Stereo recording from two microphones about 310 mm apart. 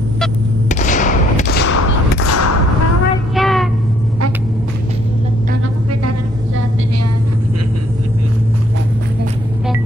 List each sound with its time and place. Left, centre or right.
0.7 s thump: left
1.8 s a sound: left
3.3 s child singing: centre